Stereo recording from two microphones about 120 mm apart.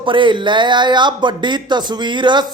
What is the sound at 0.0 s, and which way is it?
A man's voice, 45° right (ahead or behind).